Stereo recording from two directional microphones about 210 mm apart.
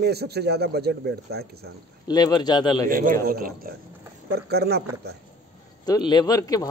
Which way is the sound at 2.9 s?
40° right (ahead or behind).